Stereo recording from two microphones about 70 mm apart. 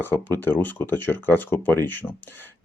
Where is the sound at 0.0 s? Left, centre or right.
Left.